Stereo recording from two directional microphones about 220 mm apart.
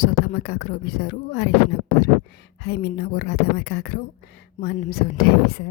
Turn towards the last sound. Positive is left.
turn(degrees=45)  # may be behind; listen again after turning